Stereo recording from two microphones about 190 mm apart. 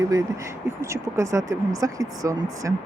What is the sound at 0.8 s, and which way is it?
Speech, 15° right (ahead or behind).